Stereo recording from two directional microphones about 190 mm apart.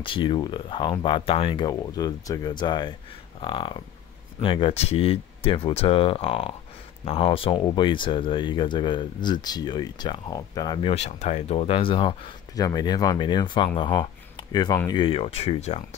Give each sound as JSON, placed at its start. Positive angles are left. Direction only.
{"t": 0.0, "sound": "speech", "side_deg": 25}